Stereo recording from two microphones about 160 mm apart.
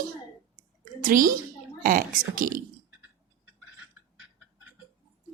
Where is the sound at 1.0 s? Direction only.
60° right (ahead or behind).